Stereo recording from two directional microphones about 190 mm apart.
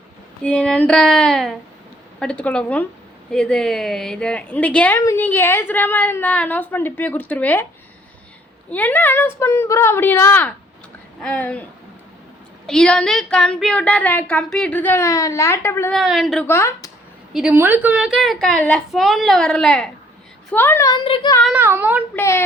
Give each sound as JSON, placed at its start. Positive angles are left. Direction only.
{"t": 0.4, "sound": "a woman's voice", "side_deg": 5}
{"t": 8.7, "sound": "a woman's voice", "side_deg": 10}
{"t": 12.6, "sound": "a woman's voice", "side_deg": 5}
{"t": 15.9, "sound": "a woman's voice", "side_deg": 0}
{"t": 16.5, "sound": "speech", "side_deg": 15}
{"t": 17.3, "sound": "a woman's voice", "side_deg": -5}
{"t": 21.0, "sound": "child singing", "side_deg": 25}
{"t": 21.4, "sound": "speech", "side_deg": -10}
{"t": 22.1, "sound": "a woman's voice", "side_deg": 15}